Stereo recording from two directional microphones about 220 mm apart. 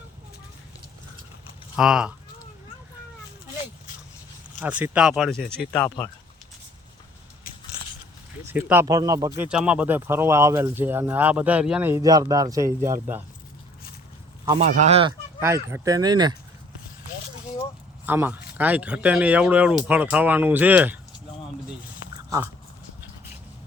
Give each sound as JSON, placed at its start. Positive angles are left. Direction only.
{"t": 1.7, "sound": "speech", "side_deg": -5}
{"t": 4.6, "sound": "speech", "side_deg": -5}
{"t": 8.4, "sound": "speech", "side_deg": -10}
{"t": 14.6, "sound": "speech", "side_deg": -30}
{"t": 15.4, "sound": "speech", "side_deg": -10}
{"t": 18.0, "sound": "speech", "side_deg": -10}